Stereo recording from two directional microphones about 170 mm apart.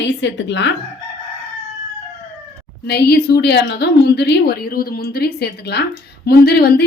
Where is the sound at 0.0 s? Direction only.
90° left.